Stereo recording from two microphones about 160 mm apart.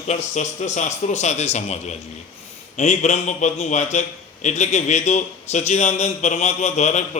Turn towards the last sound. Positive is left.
turn(degrees=45)  # may be behind; listen again after turning